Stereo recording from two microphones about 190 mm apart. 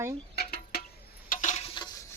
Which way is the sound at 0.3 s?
55° left (ahead or behind).